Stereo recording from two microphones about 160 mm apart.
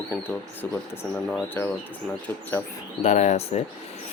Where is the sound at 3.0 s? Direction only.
50° left (ahead or behind).